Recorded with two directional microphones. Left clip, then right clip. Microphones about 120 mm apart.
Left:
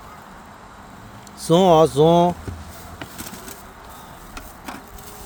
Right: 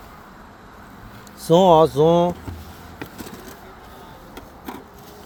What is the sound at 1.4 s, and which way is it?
Speech, 40° left (ahead or behind).